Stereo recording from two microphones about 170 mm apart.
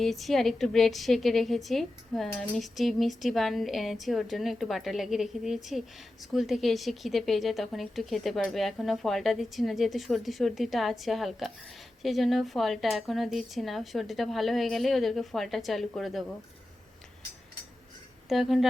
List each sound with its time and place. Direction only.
0.0 s a woman's voice: centre (ahead or behind)
18.3 s a woman's voice: centre (ahead or behind)